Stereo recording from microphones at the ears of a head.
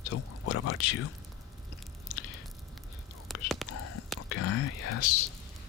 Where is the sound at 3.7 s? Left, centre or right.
Left.